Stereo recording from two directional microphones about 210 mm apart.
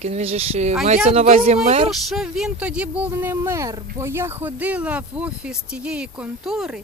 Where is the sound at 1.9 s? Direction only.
Centre (ahead or behind).